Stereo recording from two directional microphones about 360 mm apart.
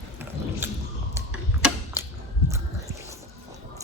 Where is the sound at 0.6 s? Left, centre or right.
Centre.